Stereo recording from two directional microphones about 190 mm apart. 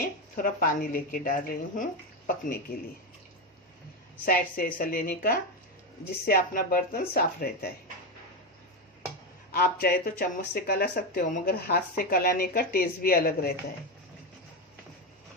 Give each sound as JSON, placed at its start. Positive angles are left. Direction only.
{"t": 0.3, "sound": "speech", "side_deg": 45}
{"t": 4.3, "sound": "speech", "side_deg": 50}
{"t": 9.5, "sound": "speech", "side_deg": 50}